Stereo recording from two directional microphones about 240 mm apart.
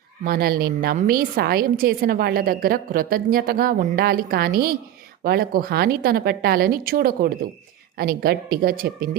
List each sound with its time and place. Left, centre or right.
0.3 s a woman's voice: right